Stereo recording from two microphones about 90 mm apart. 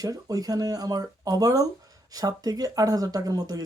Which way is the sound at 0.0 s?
40° right (ahead or behind).